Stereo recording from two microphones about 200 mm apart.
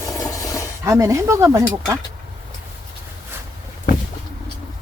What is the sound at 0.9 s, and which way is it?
Speech, 15° right (ahead or behind).